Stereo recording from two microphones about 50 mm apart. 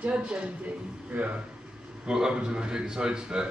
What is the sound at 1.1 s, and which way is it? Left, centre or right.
Speech, right.